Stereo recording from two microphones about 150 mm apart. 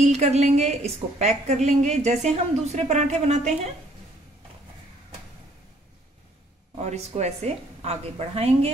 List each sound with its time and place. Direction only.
0.1 s a woman's voice: 45° right (ahead or behind)
6.8 s a woman's voice: 50° right (ahead or behind)